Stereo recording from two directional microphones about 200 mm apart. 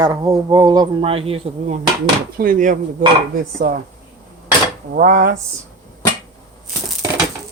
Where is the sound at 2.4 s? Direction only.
45° right (ahead or behind).